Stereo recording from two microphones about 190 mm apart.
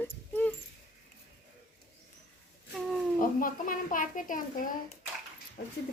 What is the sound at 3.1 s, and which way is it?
A child's voice, 45° left (ahead or behind).